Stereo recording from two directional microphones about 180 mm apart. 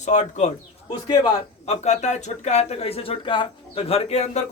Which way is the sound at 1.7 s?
40° left (ahead or behind).